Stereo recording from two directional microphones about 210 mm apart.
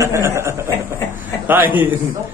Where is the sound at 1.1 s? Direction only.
10° right (ahead or behind).